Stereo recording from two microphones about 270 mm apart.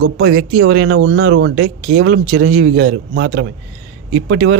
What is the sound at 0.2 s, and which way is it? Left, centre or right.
Speech, right.